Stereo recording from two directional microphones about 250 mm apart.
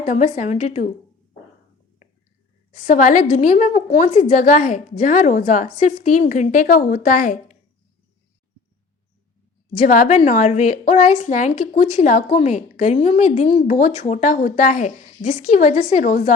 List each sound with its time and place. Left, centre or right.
0.0 s a woman's voice: left
2.7 s a woman's voice: left
9.7 s a woman's voice: left